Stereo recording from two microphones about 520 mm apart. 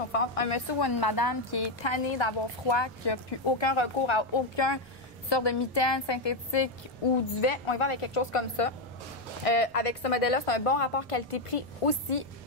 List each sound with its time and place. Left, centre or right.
0.1 s a woman's voice: left
0.7 s a woman's voice: left
7.3 s a woman's voice: left